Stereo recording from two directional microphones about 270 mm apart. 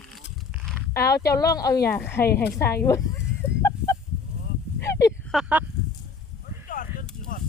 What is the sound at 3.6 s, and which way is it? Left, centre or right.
Fowl, centre.